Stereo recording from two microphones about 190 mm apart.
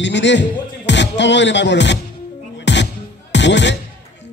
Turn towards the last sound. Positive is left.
turn(degrees=70)  # may be behind; listen again after turning